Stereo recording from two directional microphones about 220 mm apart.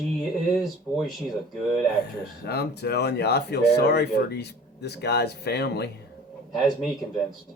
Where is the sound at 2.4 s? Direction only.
45° left (ahead or behind).